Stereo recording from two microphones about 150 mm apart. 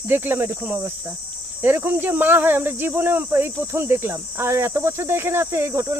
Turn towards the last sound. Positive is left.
turn(degrees=-20)  # may be behind; listen again after turning